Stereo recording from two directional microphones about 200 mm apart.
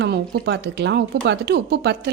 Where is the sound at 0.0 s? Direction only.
55° right (ahead or behind).